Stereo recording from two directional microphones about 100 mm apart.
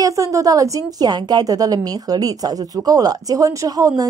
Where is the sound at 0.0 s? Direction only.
35° right (ahead or behind).